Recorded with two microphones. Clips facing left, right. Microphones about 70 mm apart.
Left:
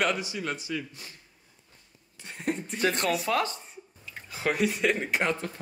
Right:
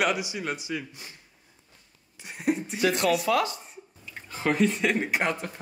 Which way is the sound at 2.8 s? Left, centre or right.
Left.